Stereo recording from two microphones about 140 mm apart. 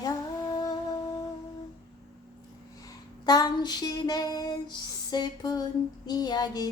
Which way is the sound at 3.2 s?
30° left (ahead or behind).